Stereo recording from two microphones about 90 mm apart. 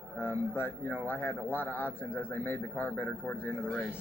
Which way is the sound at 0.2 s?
25° left (ahead or behind).